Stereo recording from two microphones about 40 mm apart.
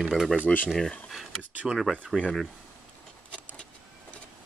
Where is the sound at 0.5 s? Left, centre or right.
Left.